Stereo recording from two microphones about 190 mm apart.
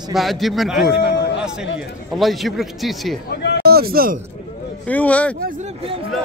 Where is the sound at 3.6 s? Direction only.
55° right (ahead or behind).